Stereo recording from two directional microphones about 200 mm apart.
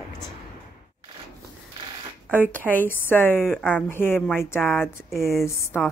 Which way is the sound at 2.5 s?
10° left (ahead or behind).